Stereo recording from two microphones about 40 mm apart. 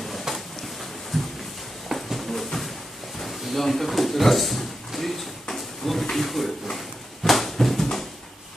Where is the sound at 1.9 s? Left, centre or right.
Centre.